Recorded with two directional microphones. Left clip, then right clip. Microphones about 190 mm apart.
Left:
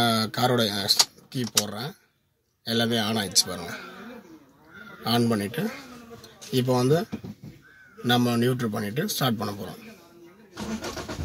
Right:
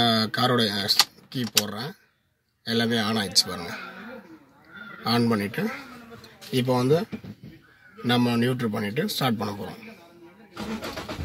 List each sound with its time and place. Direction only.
0.0 s speech: 5° right (ahead or behind)
5.0 s speech: centre (ahead or behind)